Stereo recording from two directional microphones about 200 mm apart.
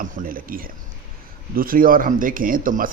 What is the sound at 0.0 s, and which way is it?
Speech, 45° right (ahead or behind).